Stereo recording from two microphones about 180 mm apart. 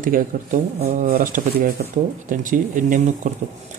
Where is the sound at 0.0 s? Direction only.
50° right (ahead or behind).